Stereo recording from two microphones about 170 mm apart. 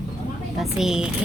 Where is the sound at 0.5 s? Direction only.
5° right (ahead or behind).